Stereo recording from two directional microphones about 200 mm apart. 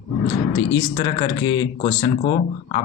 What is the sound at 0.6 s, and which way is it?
A man's voice, 20° left (ahead or behind).